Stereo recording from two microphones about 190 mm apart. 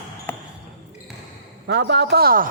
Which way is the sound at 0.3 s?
10° left (ahead or behind).